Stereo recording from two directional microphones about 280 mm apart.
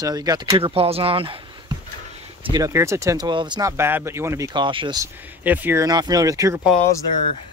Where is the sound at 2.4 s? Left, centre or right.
Centre.